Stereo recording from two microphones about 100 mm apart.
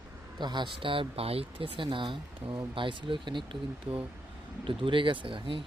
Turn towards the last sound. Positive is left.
turn(degrees=-60)  # may be behind; listen again after turning